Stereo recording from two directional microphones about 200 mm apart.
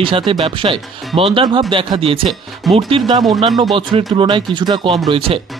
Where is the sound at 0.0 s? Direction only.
25° right (ahead or behind).